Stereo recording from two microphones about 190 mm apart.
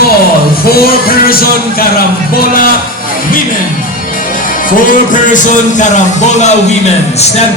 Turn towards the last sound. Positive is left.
turn(degrees=40)  # may be behind; listen again after turning